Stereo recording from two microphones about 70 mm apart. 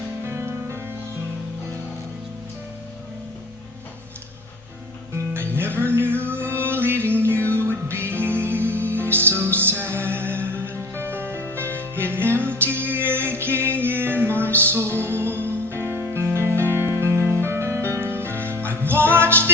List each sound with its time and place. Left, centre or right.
0.3 s music: right
5.1 s music: right